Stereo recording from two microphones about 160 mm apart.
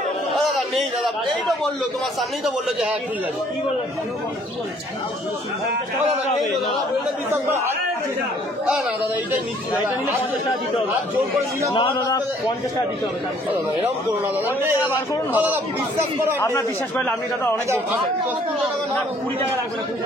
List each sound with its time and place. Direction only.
0.3 s a sound: centre (ahead or behind)
2.4 s a man's voice: 10° right (ahead or behind)
11.7 s a man's voice: 30° left (ahead or behind)
14.6 s a man's voice: 15° right (ahead or behind)
16.3 s a man's voice: 15° left (ahead or behind)